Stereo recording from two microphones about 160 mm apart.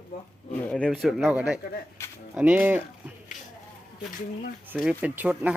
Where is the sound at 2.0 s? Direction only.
20° left (ahead or behind).